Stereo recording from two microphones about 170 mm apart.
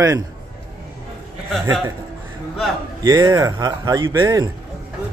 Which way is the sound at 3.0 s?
25° right (ahead or behind).